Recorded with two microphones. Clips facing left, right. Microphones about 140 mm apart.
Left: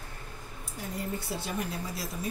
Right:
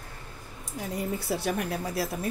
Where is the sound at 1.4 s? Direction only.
65° right (ahead or behind).